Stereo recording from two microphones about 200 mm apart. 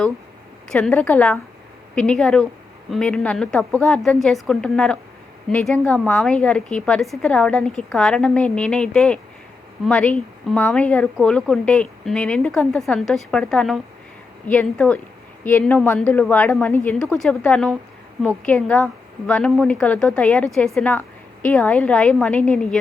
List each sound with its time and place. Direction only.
0.7 s a woman's voice: 5° left (ahead or behind)